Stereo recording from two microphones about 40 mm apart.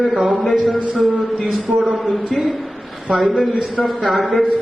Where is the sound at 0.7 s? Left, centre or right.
Centre.